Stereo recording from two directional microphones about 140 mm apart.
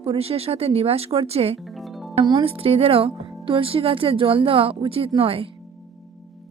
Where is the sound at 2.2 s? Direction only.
35° right (ahead or behind).